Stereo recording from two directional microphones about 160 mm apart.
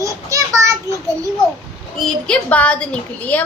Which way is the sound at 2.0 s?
10° left (ahead or behind).